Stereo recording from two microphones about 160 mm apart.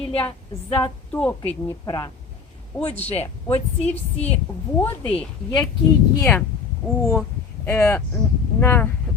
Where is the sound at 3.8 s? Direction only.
10° left (ahead or behind).